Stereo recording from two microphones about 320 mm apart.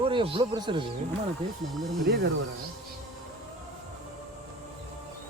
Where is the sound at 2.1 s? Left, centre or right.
Right.